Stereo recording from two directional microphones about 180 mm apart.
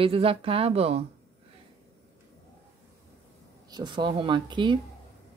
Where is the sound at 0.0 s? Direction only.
30° right (ahead or behind).